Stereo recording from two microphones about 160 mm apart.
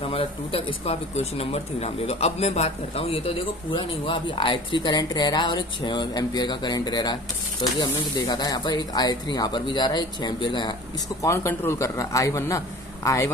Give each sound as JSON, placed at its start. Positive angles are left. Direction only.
{"t": 0.1, "sound": "speech", "side_deg": 35}
{"t": 11.2, "sound": "speech", "side_deg": 15}